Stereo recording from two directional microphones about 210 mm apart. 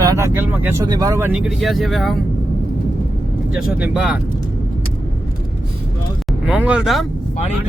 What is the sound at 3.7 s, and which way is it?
Speech, 5° right (ahead or behind).